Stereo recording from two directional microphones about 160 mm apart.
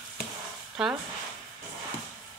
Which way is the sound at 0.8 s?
5° right (ahead or behind).